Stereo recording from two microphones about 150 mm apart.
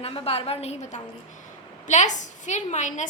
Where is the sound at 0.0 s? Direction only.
40° left (ahead or behind).